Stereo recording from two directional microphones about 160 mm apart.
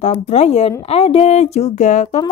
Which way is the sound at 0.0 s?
40° left (ahead or behind).